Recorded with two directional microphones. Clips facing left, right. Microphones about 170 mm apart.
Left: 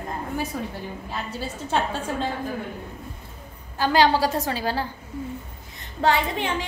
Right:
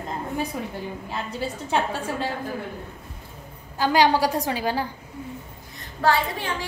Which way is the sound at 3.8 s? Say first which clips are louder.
Even; 15° right (ahead or behind).